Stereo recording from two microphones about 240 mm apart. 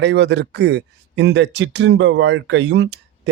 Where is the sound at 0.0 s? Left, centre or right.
Right.